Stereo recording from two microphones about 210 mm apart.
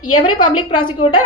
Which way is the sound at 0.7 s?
25° left (ahead or behind).